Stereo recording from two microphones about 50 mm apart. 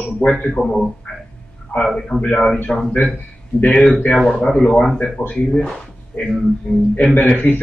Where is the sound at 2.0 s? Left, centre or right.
Centre.